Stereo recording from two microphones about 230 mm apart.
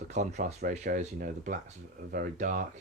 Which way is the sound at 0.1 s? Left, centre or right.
Right.